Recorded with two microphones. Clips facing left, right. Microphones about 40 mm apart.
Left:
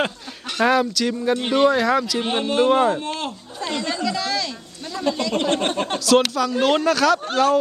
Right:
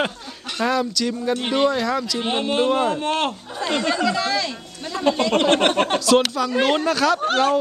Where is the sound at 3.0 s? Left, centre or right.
Right.